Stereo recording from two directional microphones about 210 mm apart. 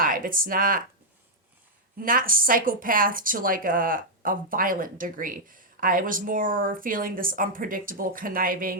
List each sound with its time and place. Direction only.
0.0 s speech: 40° right (ahead or behind)
2.0 s speech: 40° right (ahead or behind)